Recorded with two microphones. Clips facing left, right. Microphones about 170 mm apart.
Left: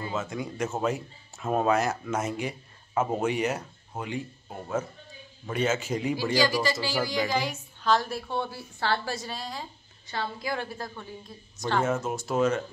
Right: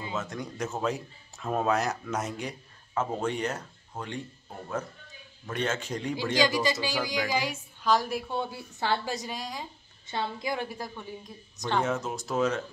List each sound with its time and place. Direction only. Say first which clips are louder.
0.1 s a man's voice: left 2 dB; centre (ahead or behind)
6.3 s a woman's voice: right 1 dB; 20° right (ahead or behind)
11.8 s a man's voice: left 2 dB; centre (ahead or behind)